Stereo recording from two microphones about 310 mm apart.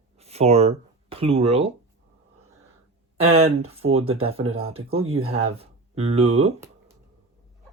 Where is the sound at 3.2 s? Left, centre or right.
Centre.